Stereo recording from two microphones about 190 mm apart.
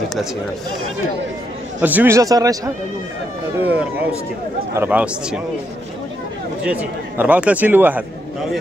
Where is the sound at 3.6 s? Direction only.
10° right (ahead or behind).